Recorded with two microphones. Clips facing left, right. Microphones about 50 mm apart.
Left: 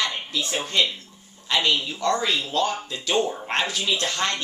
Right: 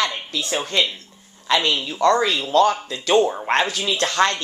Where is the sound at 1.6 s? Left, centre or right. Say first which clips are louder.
Right 1 dB; right.